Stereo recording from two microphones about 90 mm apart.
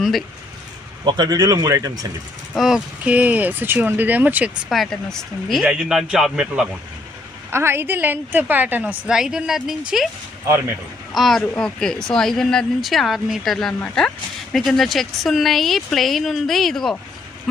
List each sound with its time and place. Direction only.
0.0 s speech: centre (ahead or behind)
1.0 s speech: 50° right (ahead or behind)
2.6 s speech: 5° right (ahead or behind)
3.0 s a woman's voice: 15° right (ahead or behind)
4.7 s speech: 5° left (ahead or behind)
7.5 s a woman's voice: 30° right (ahead or behind); by 10.1 s 5° right (ahead or behind)
10.4 s speech: 35° right (ahead or behind)
11.1 s speech: centre (ahead or behind)